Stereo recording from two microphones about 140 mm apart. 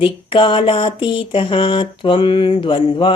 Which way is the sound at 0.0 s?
40° left (ahead or behind).